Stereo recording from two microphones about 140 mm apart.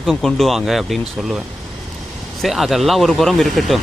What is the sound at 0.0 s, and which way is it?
Speech, centre (ahead or behind).